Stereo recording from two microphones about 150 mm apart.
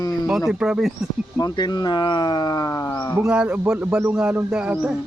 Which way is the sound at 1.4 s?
25° left (ahead or behind).